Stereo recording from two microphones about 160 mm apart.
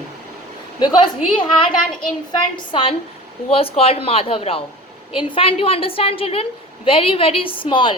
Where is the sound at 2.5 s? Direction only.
30° left (ahead or behind).